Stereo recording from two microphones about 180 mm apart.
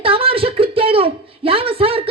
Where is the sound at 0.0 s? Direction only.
30° right (ahead or behind).